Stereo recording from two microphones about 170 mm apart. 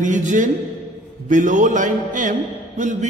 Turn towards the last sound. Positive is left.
turn(degrees=-50)  # may be behind; listen again after turning